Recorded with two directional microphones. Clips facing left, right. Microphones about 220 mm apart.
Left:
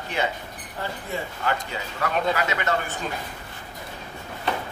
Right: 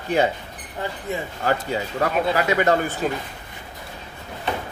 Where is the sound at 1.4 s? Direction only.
40° right (ahead or behind).